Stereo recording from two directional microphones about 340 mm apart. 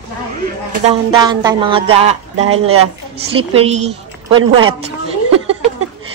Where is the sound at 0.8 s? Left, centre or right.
Centre.